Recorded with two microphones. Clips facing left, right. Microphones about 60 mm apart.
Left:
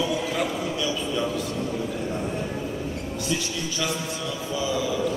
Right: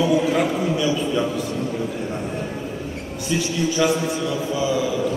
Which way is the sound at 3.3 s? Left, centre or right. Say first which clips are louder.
Right 9 dB; right.